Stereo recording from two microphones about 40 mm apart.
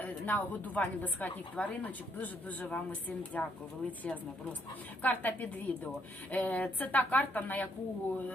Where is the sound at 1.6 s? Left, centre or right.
Left.